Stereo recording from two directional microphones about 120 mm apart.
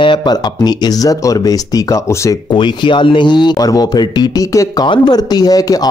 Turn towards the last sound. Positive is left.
turn(degrees=30)  # may be behind; listen again after turning